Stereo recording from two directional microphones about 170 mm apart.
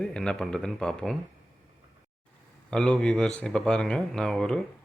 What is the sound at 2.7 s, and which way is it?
Speech, 5° left (ahead or behind).